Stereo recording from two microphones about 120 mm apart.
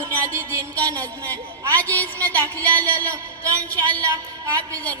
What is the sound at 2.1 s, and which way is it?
Speech, 30° right (ahead or behind).